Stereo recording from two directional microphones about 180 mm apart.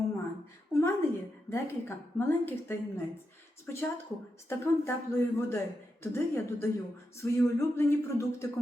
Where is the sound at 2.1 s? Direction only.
15° left (ahead or behind).